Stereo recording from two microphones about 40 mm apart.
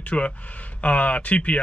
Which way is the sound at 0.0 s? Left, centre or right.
Left.